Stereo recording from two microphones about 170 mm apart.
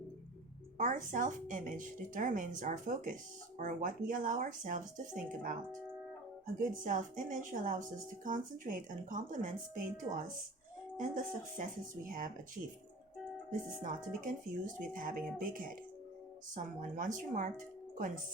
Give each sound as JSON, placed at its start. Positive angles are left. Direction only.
{"t": 0.8, "sound": "speech", "side_deg": -50}
{"t": 6.6, "sound": "speech", "side_deg": -50}
{"t": 13.5, "sound": "speech", "side_deg": -50}
{"t": 16.8, "sound": "speech", "side_deg": -50}